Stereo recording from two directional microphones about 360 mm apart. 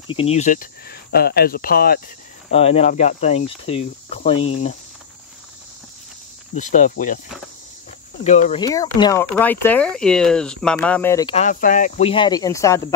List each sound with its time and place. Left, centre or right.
0.1 s speech: centre
6.5 s speech: left
8.2 s speech: centre